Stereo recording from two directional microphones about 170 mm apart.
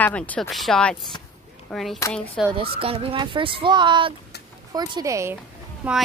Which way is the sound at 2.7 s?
35° right (ahead or behind).